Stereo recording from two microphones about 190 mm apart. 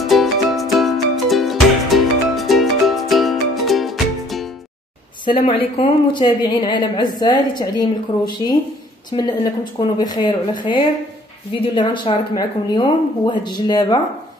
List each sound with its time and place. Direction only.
0.0 s music: centre (ahead or behind)
5.2 s speech: 30° left (ahead or behind)
9.1 s speech: 20° left (ahead or behind)